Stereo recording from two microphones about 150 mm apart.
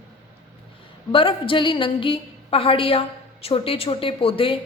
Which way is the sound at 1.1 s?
35° left (ahead or behind).